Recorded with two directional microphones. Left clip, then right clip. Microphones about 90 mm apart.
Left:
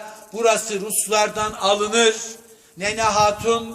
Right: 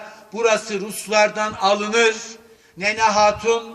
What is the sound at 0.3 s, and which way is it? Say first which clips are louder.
A man's voice: even; 30° left (ahead or behind).